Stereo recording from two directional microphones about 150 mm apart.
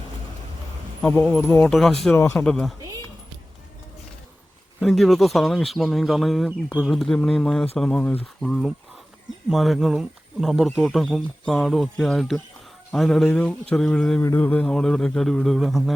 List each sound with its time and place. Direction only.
1.0 s speech: 10° left (ahead or behind)
1.7 s speech: centre (ahead or behind)
2.1 s speech: 20° left (ahead or behind)
2.4 s speech: 5° left (ahead or behind)
4.8 s speech: centre (ahead or behind)